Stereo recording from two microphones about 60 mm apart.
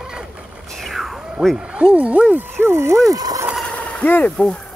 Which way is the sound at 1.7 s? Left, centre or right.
Right.